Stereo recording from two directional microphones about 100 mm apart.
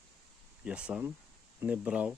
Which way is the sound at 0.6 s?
10° right (ahead or behind).